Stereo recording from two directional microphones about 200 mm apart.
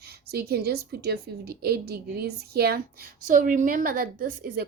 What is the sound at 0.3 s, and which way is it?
A woman's voice, 50° right (ahead or behind).